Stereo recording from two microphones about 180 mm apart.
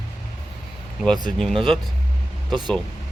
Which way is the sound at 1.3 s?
Centre (ahead or behind).